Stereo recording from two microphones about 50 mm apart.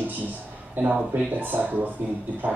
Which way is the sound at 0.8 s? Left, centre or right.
Right.